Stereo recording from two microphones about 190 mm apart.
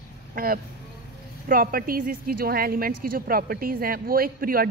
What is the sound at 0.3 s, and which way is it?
A woman's voice, 50° right (ahead or behind).